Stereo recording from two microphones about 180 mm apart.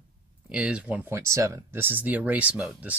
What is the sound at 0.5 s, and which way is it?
Speech, 5° right (ahead or behind).